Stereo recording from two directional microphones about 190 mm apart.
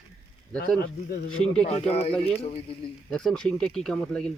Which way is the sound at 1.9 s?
35° left (ahead or behind).